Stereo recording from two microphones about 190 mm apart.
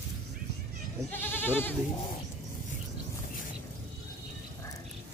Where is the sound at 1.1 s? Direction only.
10° left (ahead or behind).